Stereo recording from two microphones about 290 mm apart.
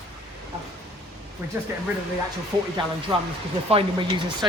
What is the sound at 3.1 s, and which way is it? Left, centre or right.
Speech, centre.